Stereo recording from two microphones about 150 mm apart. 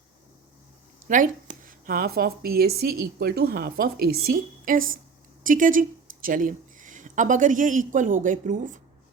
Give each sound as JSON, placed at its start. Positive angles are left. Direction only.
{"t": 1.0, "sound": "a woman's voice", "side_deg": -60}